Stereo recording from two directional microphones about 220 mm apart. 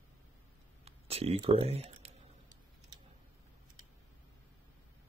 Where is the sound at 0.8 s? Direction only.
25° right (ahead or behind).